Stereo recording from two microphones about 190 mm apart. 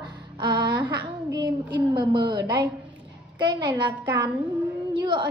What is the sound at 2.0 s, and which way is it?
A woman's voice, 20° right (ahead or behind).